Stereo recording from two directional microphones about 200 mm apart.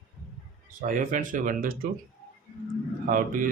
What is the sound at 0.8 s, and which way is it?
Speech, 40° right (ahead or behind).